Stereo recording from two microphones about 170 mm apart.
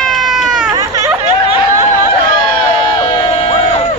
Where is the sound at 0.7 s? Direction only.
20° right (ahead or behind).